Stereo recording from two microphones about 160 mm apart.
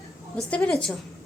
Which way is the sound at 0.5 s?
5° left (ahead or behind).